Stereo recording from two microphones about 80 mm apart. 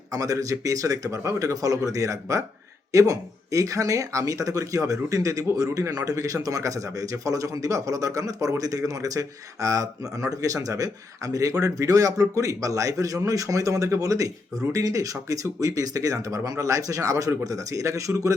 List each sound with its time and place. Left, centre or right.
0.1 s speech: right